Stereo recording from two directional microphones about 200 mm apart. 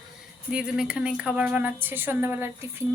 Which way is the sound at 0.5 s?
5° right (ahead or behind).